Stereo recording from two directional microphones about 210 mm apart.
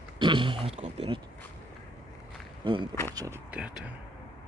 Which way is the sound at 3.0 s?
15° right (ahead or behind).